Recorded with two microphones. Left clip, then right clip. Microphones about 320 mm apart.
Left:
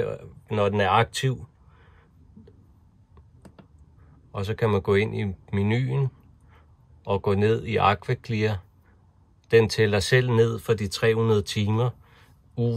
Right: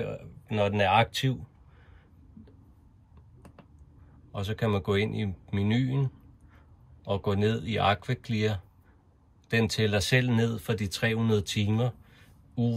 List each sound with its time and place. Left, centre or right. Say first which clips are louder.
0.0 s speech: left 6 dB; left
4.3 s speech: left 5 dB; left